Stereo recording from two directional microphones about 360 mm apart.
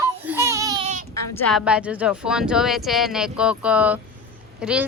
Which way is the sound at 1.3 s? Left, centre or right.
Centre.